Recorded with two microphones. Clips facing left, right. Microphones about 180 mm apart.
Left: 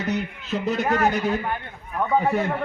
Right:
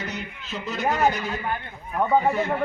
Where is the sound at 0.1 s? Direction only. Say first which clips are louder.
Left 8 dB; 60° left (ahead or behind).